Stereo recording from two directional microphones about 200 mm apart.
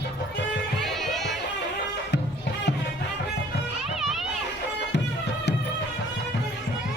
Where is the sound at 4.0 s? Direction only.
Centre (ahead or behind).